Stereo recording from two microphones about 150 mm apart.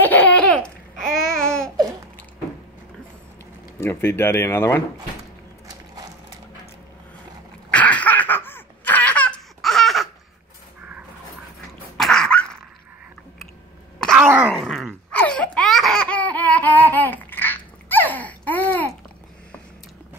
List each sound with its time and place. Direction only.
0.0 s babbling: 10° left (ahead or behind)
3.8 s speech: 15° left (ahead or behind)
7.7 s laughter: 10° left (ahead or behind)
12.0 s dog: 5° left (ahead or behind)
13.9 s groan: 5° left (ahead or behind)
14.2 s groan: 10° right (ahead or behind)
14.5 s laughter: centre (ahead or behind)